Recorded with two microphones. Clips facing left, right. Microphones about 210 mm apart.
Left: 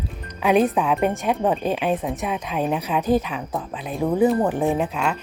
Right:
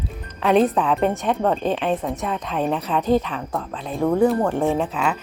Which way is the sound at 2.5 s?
5° left (ahead or behind).